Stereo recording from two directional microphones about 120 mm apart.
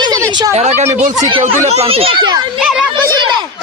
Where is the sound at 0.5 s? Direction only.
70° right (ahead or behind).